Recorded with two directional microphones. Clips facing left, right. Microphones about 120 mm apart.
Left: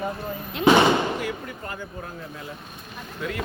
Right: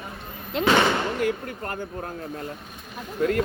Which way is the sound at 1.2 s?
50° right (ahead or behind).